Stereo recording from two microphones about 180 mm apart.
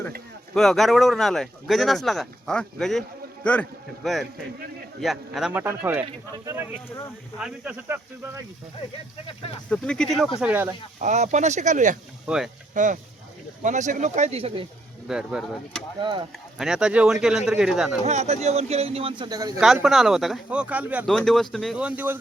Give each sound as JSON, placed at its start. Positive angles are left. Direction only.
{"t": 0.5, "sound": "speech", "side_deg": 0}
{"t": 7.3, "sound": "speech", "side_deg": -5}
{"t": 9.6, "sound": "speech", "side_deg": 5}
{"t": 10.4, "sound": "speech", "side_deg": -10}
{"t": 11.0, "sound": "speech", "side_deg": -40}
{"t": 15.0, "sound": "speech", "side_deg": -5}
{"t": 16.0, "sound": "speech", "side_deg": -25}
{"t": 16.6, "sound": "speech", "side_deg": -5}
{"t": 18.0, "sound": "speech", "side_deg": -35}
{"t": 19.5, "sound": "speech", "side_deg": 0}
{"t": 21.1, "sound": "speech", "side_deg": 0}